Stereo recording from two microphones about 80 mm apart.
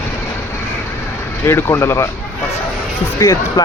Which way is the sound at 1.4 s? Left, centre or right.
Left.